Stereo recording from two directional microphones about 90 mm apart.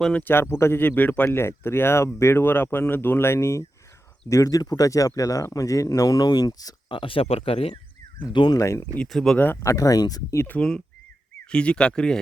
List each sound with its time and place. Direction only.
0.1 s speech: 20° left (ahead or behind); by 6.7 s 45° left (ahead or behind)
6.8 s speech: 70° left (ahead or behind); by 7.8 s 90° left
8.3 s speech: 60° left (ahead or behind)
8.5 s speech: 35° left (ahead or behind)
9.0 s speech: 5° left (ahead or behind)
9.6 s speech: 40° left (ahead or behind)
10.3 s speech: 25° left (ahead or behind)
10.6 s speech: 10° left (ahead or behind)